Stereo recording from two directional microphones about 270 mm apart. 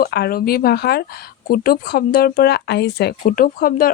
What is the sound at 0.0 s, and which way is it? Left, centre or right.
Speech, left.